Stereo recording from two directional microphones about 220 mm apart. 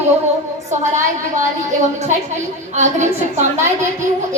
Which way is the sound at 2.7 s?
30° right (ahead or behind).